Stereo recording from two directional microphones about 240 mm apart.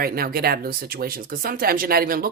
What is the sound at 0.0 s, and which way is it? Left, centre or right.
Speech, right.